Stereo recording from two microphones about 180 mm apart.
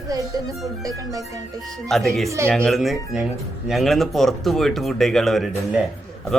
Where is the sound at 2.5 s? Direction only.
Centre (ahead or behind).